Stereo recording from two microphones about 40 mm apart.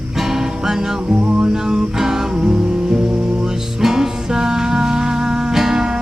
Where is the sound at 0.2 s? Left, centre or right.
Centre.